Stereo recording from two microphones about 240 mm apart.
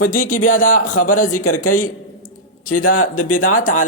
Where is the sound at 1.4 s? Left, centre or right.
Left.